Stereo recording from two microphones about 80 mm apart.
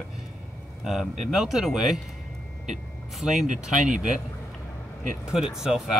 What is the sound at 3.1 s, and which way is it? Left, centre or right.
Speech, centre.